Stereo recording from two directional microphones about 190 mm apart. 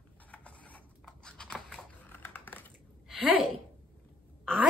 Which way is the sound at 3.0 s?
5° right (ahead or behind).